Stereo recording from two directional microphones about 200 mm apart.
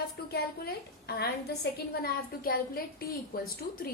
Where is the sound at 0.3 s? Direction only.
50° left (ahead or behind).